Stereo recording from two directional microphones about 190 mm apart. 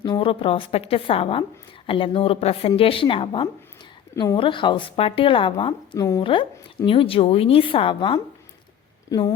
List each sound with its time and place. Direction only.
0.0 s a woman's voice: 25° left (ahead or behind)